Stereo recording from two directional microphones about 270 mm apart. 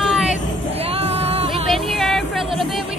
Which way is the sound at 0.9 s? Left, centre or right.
Right.